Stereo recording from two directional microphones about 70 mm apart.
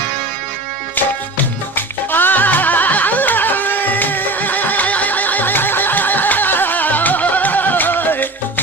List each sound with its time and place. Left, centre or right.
1.7 s music: left